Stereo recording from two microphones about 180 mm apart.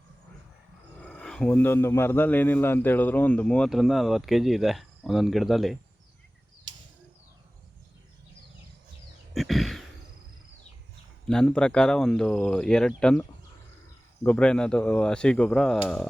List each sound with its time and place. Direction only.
1.0 s a man's voice: 5° left (ahead or behind)
9.3 s a sound: centre (ahead or behind)
11.3 s a man's voice: 5° left (ahead or behind)
14.3 s a man's voice: 5° left (ahead or behind)